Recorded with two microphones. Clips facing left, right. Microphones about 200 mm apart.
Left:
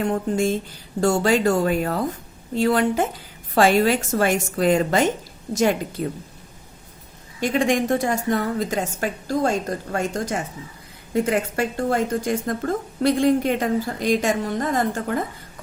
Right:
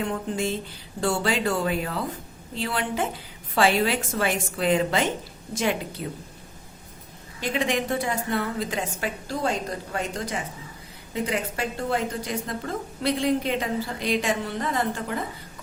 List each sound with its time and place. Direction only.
0.0 s a woman's voice: 45° left (ahead or behind)
7.4 s a woman's voice: 45° left (ahead or behind)